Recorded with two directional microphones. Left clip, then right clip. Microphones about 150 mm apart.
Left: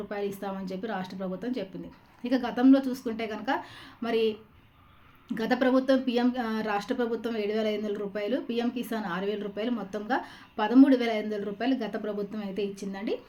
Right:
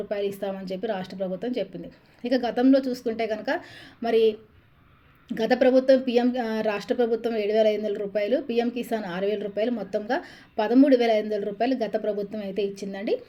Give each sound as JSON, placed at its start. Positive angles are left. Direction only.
{"t": 0.1, "sound": "a woman's voice", "side_deg": -20}